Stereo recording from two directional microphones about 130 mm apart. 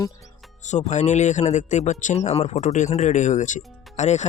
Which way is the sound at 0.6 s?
65° left (ahead or behind).